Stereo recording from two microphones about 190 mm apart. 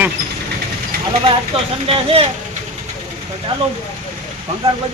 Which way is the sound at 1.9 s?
30° right (ahead or behind).